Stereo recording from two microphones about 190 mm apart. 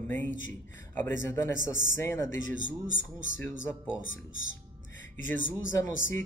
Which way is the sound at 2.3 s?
85° left.